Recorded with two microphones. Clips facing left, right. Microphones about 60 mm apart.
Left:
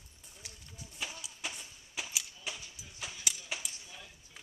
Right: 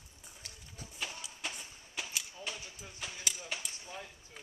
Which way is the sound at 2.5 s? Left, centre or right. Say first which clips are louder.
Even; centre.